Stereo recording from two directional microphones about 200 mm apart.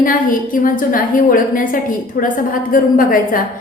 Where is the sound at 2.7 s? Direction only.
45° left (ahead or behind).